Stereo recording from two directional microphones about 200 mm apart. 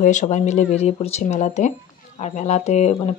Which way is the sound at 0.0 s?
35° left (ahead or behind).